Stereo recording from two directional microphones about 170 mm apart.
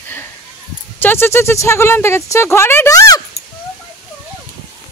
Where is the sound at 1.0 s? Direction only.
15° left (ahead or behind).